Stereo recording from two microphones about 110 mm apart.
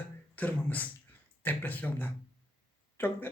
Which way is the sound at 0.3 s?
15° left (ahead or behind).